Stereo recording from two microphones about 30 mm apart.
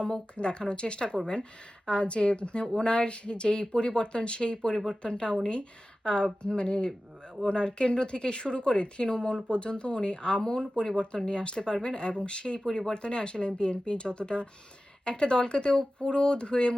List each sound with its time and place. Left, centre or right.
0.3 s speech: left
12.6 s speech: centre
12.9 s speech: left